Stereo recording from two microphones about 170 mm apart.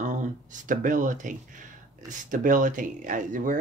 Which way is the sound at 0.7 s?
50° right (ahead or behind).